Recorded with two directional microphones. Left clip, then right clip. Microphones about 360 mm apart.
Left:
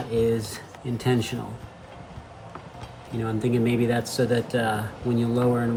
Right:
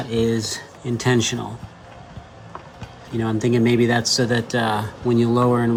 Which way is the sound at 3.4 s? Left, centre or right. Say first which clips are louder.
Right 6 dB; centre.